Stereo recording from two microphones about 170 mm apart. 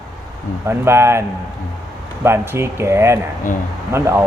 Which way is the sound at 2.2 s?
15° right (ahead or behind).